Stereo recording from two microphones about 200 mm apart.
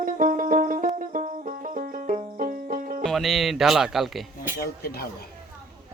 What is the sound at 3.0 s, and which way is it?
Music, centre (ahead or behind).